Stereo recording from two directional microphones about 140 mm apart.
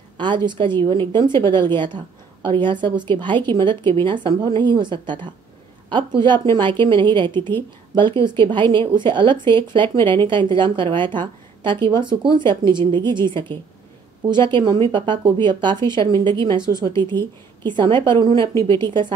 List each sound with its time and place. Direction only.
0.5 s a woman's voice: 35° right (ahead or behind)
18.5 s a woman's voice: 20° left (ahead or behind)